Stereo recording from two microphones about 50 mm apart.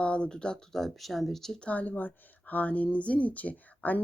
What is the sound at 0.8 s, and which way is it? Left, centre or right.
Speech, centre.